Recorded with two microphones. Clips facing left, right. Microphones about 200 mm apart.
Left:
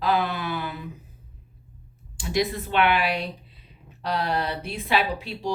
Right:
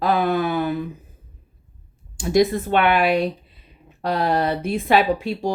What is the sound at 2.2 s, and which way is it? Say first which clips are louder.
Speech: right 8 dB; 45° right (ahead or behind).